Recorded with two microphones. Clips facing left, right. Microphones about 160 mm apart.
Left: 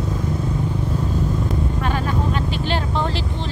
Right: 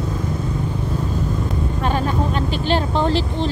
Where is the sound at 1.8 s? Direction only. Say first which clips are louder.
Right 5 dB; 30° right (ahead or behind).